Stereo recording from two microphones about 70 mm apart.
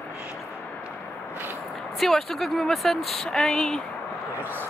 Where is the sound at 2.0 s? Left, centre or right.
Centre.